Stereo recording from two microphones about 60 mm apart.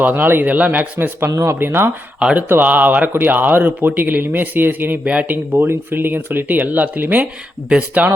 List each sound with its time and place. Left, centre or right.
0.0 s speech: right
1.3 s speech: right
1.5 s speech: right
2.1 s speech: centre
2.5 s speech: right